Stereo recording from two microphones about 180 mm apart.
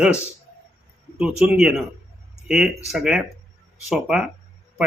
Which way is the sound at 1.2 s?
5° right (ahead or behind).